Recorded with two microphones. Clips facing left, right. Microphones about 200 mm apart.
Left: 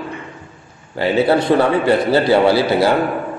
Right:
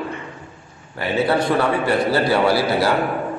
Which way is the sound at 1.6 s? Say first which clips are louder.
Left 4 dB; 25° left (ahead or behind).